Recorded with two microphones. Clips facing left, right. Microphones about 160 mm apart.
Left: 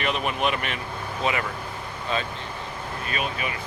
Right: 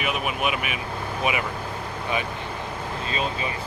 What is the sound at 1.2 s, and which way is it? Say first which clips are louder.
Vehicle: even; 15° right (ahead or behind).